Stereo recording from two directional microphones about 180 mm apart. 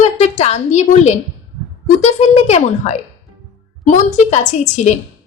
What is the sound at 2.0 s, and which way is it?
A woman's voice, 35° left (ahead or behind).